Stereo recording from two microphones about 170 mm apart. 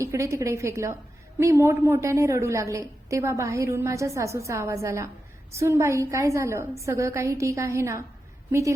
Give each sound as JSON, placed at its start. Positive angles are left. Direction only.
{"t": 0.0, "sound": "a woman's voice", "side_deg": -15}